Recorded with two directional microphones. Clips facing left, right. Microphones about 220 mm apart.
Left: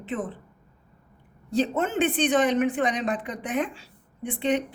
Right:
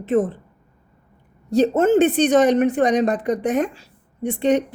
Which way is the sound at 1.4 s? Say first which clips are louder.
Right 9 dB; 40° right (ahead or behind).